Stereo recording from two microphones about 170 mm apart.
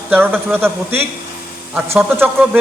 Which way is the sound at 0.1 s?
10° right (ahead or behind).